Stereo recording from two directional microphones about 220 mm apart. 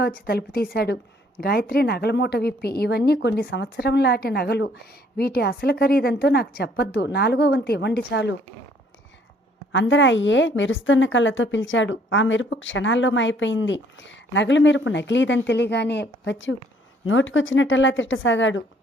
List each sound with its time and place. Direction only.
0.3 s a woman's voice: 45° left (ahead or behind)
9.7 s a woman's voice: 55° left (ahead or behind)